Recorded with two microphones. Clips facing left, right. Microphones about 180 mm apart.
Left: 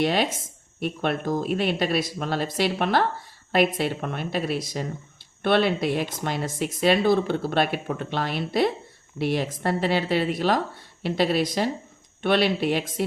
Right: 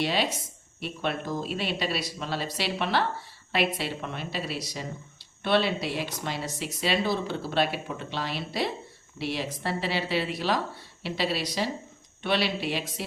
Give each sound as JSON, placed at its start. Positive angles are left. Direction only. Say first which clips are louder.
{"t": 0.0, "sound": "speech", "louder": "left 4 dB", "side_deg": 50}